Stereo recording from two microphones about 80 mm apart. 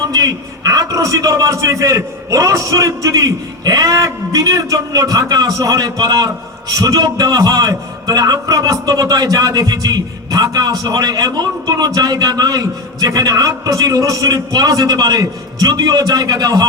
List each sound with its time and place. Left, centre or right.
0.1 s a man's voice: right